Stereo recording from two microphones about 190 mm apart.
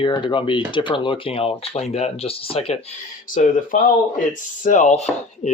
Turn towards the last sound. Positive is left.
turn(degrees=35)  # may be behind; listen again after turning